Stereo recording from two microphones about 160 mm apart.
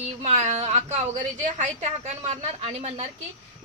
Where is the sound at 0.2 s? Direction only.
45° right (ahead or behind).